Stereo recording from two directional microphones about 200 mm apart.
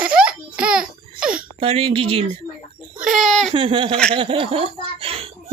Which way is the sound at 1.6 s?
30° right (ahead or behind).